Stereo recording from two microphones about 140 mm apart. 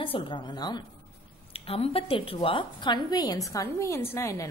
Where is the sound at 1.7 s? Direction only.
45° left (ahead or behind).